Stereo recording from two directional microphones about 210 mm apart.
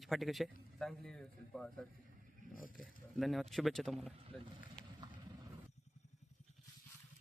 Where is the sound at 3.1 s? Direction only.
Centre (ahead or behind).